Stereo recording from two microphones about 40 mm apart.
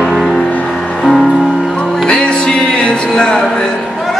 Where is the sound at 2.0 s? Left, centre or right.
Left.